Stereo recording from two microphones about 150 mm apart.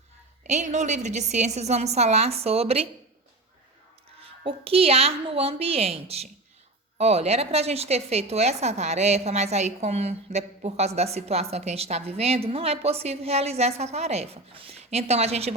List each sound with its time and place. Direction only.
0.4 s a woman's voice: 50° right (ahead or behind)
4.2 s a woman's voice: 40° right (ahead or behind)